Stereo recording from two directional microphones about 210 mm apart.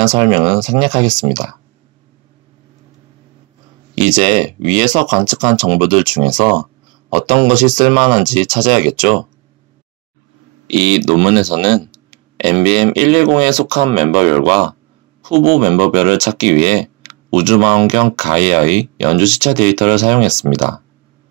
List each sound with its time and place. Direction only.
0.0 s speech: 20° right (ahead or behind)
3.9 s speech: 25° right (ahead or behind)
10.7 s speech: 30° right (ahead or behind)